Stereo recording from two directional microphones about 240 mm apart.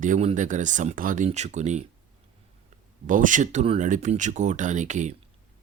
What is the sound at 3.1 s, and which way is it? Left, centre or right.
Speech, right.